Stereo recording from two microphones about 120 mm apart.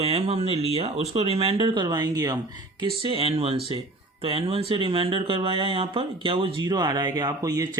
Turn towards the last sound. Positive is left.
turn(degrees=-30)  # may be behind; listen again after turning